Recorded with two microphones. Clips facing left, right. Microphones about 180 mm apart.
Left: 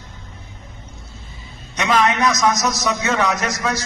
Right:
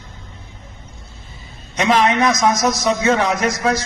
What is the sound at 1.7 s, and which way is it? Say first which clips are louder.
A man's voice: right 2 dB; 30° right (ahead or behind).